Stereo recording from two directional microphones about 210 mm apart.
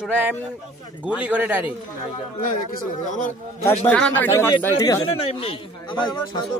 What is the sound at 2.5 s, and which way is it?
Speech, 40° left (ahead or behind).